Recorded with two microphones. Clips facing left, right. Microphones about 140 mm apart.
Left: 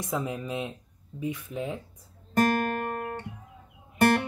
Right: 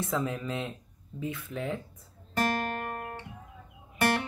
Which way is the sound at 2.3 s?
50° left (ahead or behind).